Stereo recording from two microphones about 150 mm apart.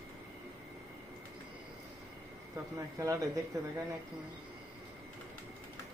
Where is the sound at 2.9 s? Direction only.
20° right (ahead or behind).